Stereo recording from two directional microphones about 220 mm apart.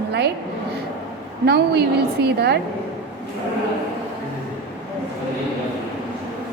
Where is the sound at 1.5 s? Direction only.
50° right (ahead or behind).